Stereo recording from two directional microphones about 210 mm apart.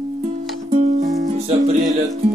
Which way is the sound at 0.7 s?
35° right (ahead or behind).